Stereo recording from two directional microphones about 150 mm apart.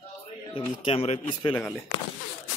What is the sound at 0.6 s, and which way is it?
Speech, 40° left (ahead or behind).